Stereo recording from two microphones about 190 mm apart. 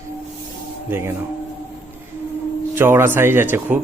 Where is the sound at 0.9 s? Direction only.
10° right (ahead or behind).